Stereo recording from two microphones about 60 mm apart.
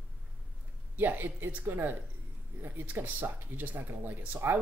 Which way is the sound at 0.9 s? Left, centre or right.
Right.